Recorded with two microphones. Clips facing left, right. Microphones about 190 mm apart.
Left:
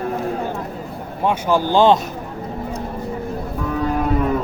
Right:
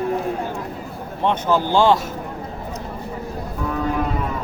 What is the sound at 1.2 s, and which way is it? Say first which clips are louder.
Speech: left 1 dB; 10° left (ahead or behind).